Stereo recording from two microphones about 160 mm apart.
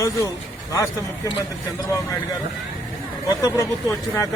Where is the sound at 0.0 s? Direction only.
20° left (ahead or behind).